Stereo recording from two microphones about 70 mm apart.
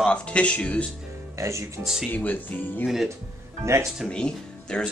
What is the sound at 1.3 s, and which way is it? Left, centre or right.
Speech, right.